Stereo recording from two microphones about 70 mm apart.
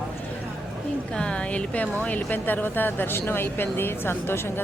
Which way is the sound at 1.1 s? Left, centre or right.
Centre.